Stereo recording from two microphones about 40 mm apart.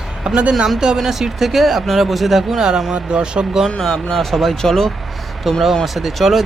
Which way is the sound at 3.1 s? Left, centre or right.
Right.